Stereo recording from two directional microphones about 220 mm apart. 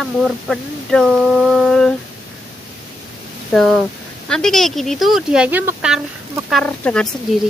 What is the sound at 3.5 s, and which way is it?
Speech, centre (ahead or behind).